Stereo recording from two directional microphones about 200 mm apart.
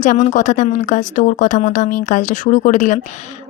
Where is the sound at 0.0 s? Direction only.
40° left (ahead or behind).